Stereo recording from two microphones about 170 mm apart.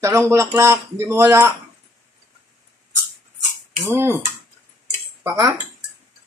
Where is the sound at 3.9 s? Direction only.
15° right (ahead or behind).